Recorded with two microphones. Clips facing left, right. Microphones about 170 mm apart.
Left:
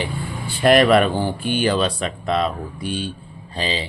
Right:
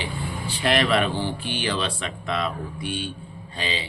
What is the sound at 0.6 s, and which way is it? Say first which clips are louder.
A man's voice: left 8 dB; 45° left (ahead or behind).